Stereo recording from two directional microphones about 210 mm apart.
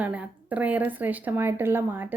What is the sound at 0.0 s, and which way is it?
Speech, 5° right (ahead or behind).